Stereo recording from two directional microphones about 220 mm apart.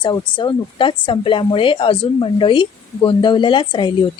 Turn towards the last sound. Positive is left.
turn(degrees=20)  # may be behind; listen again after turning